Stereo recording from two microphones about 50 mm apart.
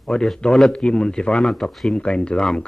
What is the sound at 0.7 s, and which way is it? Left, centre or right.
Speech, centre.